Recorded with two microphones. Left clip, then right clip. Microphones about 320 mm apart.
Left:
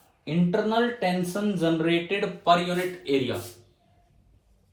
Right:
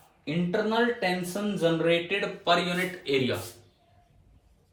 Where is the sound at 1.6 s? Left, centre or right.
Left.